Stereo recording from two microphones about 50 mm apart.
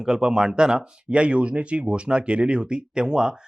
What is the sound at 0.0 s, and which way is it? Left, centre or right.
Speech, centre.